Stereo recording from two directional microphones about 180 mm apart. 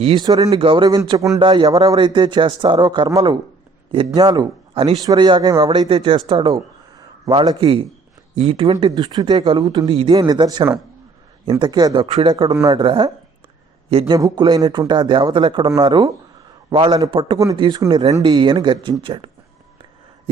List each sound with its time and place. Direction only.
0.0 s a man's voice: 30° right (ahead or behind)
14.1 s a man's voice: 20° right (ahead or behind)